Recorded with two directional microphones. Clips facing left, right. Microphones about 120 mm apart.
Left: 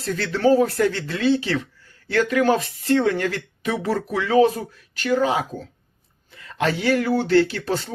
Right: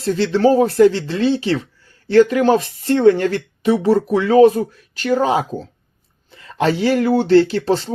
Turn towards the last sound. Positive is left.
turn(degrees=-30)  # may be behind; listen again after turning